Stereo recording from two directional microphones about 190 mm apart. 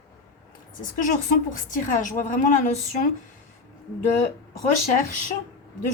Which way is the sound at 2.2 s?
45° left (ahead or behind).